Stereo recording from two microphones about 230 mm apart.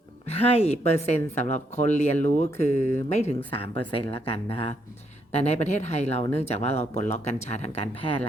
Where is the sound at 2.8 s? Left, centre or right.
Right.